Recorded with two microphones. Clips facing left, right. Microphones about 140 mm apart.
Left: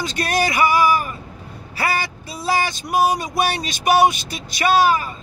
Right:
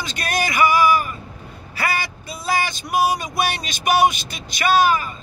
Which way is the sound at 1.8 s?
35° left (ahead or behind).